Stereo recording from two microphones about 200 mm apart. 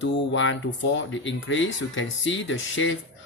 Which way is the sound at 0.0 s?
70° left (ahead or behind).